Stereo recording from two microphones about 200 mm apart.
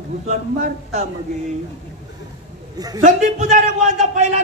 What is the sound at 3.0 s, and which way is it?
Speech, 35° right (ahead or behind).